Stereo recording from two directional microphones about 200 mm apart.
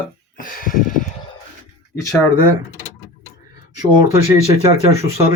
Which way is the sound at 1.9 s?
15° left (ahead or behind).